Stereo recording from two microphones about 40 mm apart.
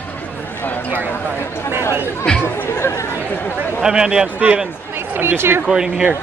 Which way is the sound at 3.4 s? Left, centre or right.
Left.